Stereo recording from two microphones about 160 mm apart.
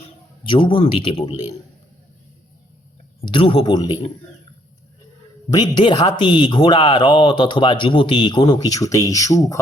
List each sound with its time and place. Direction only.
0.4 s speech: 30° left (ahead or behind)
3.2 s speech: 35° left (ahead or behind)
5.5 s speech: 30° left (ahead or behind)